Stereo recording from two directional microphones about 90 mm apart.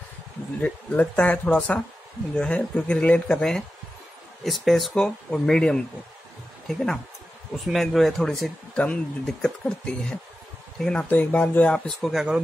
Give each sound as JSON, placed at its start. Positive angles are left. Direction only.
{"t": 0.6, "sound": "speech", "side_deg": 15}
{"t": 12.0, "sound": "speech", "side_deg": -5}